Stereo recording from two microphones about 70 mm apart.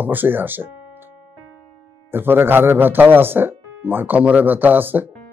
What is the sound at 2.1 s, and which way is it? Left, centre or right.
Speech, right.